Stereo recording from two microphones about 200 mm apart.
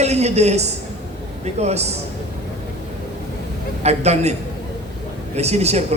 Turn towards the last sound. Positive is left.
turn(degrees=-30)  # may be behind; listen again after turning